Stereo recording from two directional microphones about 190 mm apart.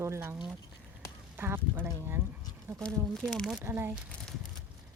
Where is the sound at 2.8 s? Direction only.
5° left (ahead or behind).